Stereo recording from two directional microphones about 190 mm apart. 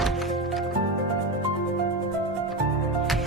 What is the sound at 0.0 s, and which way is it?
Music, centre (ahead or behind).